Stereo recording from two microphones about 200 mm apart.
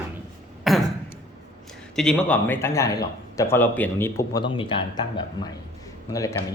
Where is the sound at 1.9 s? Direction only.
5° left (ahead or behind).